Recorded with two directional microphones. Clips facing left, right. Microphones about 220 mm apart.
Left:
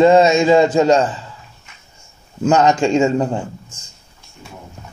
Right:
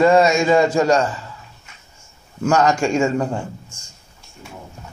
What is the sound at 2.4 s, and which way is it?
Speech, 20° left (ahead or behind).